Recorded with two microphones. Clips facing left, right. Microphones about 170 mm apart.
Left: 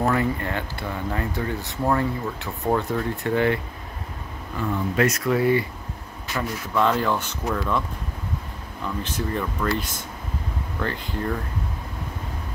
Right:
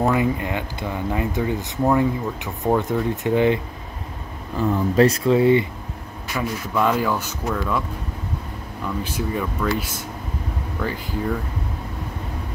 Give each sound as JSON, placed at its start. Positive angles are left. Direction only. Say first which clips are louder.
{"t": 0.0, "sound": "speech", "louder": "right 3 dB", "side_deg": -15}
{"t": 4.6, "sound": "speech", "louder": "right 6 dB", "side_deg": -30}
{"t": 6.3, "sound": "speech", "louder": "right 1 dB", "side_deg": -10}
{"t": 9.0, "sound": "speech", "louder": "right 1 dB", "side_deg": -10}